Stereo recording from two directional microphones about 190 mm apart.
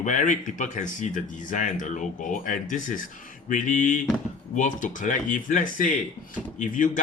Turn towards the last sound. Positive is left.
turn(degrees=45)  # may be behind; listen again after turning